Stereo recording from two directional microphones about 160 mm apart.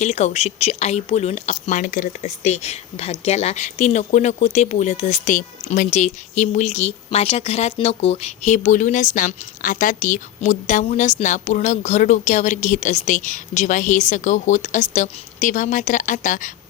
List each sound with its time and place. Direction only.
0.0 s speech: 45° left (ahead or behind)